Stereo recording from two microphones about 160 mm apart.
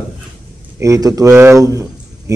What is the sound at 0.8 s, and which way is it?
Speech, 20° right (ahead or behind).